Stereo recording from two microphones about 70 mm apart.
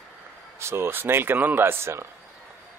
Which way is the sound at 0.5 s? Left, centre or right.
Right.